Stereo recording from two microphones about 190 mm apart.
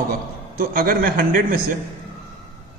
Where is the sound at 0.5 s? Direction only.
50° right (ahead or behind).